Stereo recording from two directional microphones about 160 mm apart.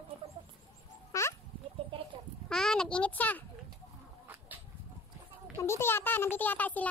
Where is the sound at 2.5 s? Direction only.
5° left (ahead or behind).